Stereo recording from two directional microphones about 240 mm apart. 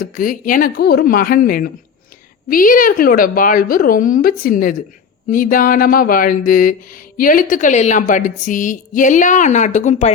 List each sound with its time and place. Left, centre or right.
0.0 s speech: left